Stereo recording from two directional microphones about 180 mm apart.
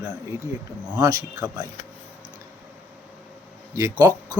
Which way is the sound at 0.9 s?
20° right (ahead or behind).